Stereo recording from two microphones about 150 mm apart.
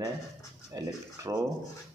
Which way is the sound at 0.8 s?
25° right (ahead or behind).